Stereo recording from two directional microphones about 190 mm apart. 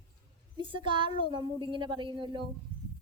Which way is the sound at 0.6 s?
25° right (ahead or behind).